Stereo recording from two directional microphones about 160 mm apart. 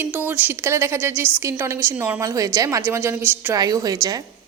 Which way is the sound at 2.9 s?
15° right (ahead or behind).